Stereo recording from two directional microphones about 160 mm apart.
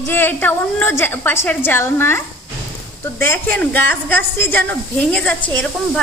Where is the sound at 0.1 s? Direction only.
15° left (ahead or behind).